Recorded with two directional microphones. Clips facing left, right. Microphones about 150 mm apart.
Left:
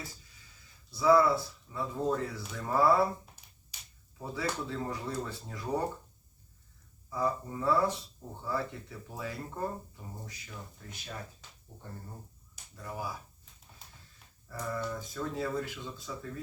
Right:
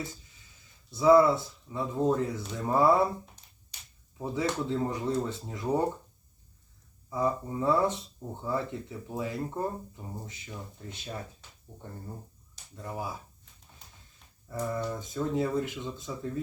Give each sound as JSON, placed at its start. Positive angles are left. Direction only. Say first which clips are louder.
{"t": 0.9, "sound": "speech", "louder": "right 4 dB", "side_deg": -20}
{"t": 4.2, "sound": "speech", "louder": "right 5 dB", "side_deg": -20}
{"t": 7.1, "sound": "speech", "louder": "right 3 dB", "side_deg": -20}
{"t": 12.7, "sound": "speech", "louder": "right 2 dB", "side_deg": -25}
{"t": 14.4, "sound": "speech", "louder": "right 4 dB", "side_deg": -20}